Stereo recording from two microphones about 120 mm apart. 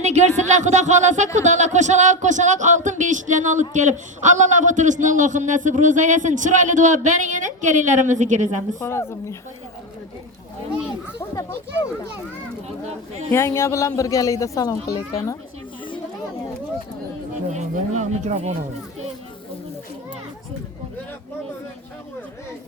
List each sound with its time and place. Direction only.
0.0 s speech: 70° right (ahead or behind); by 8.4 s 90° right
8.8 s a man's voice: 20° left (ahead or behind)
13.3 s a man's voice: 25° left (ahead or behind)
17.5 s speech: 75° right (ahead or behind)